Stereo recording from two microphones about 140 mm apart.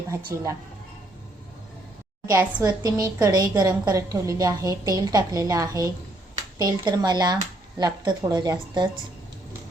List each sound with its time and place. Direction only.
0.3 s a woman's voice: 20° right (ahead or behind)
2.5 s a woman's voice: 25° right (ahead or behind)